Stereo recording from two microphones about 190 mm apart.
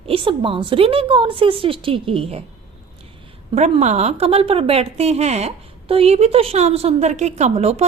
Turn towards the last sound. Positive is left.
turn(degrees=-35)  # may be behind; listen again after turning